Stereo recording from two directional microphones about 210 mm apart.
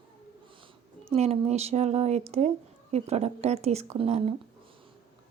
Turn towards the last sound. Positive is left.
turn(degrees=-30)  # may be behind; listen again after turning